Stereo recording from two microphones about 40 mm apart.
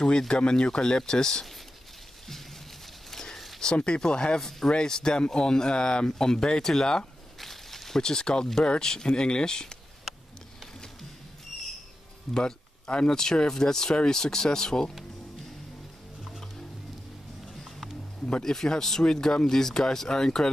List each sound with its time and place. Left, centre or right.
0.3 s speech: left
3.1 s a sound: centre
3.7 s speech: left
7.3 s snake: centre
8.0 s speech: centre
12.3 s speech: centre
12.8 s speech: left
18.2 s speech: centre